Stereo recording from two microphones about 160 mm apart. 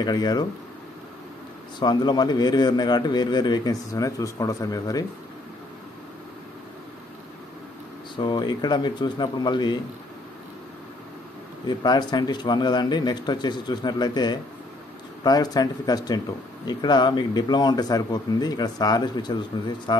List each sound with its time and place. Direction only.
0.0 s a man's voice: 25° left (ahead or behind)
1.8 s a man's voice: 25° left (ahead or behind)
8.2 s a man's voice: 25° left (ahead or behind)
11.6 s a man's voice: 25° left (ahead or behind)